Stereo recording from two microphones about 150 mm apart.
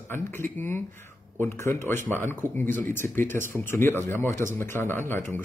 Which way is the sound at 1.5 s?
15° left (ahead or behind).